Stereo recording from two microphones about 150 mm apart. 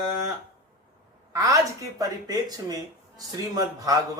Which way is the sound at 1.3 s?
20° right (ahead or behind).